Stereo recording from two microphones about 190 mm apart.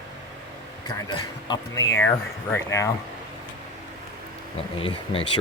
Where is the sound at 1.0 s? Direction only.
20° left (ahead or behind).